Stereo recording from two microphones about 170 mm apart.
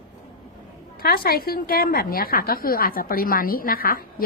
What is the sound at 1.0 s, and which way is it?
A woman's voice, 60° left (ahead or behind).